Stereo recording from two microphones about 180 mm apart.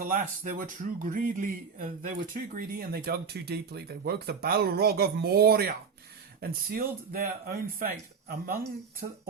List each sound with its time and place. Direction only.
0.0 s speech: 50° right (ahead or behind)
9.0 s speech: 45° right (ahead or behind)